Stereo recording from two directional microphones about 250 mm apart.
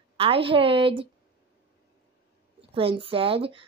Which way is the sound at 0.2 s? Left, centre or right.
Right.